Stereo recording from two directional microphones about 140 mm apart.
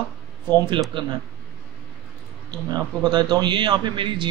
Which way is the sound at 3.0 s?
30° right (ahead or behind).